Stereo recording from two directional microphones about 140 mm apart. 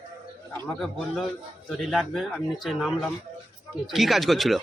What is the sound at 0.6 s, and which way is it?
A man's voice, centre (ahead or behind).